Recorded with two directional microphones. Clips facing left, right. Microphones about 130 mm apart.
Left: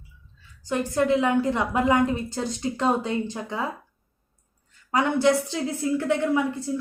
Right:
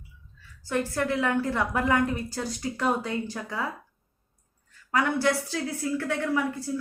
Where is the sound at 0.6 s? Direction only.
20° left (ahead or behind).